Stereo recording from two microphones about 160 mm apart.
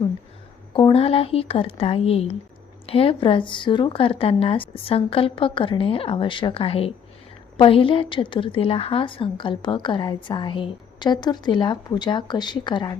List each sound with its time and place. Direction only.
0.7 s a woman's voice: 30° left (ahead or behind)